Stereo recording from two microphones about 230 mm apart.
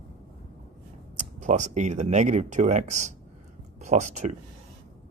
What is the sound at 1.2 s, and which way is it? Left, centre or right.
Speech, right.